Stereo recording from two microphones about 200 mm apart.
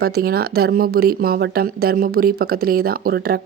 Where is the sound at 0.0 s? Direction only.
50° right (ahead or behind).